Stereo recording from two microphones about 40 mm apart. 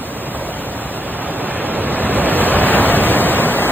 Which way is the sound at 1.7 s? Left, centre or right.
Right.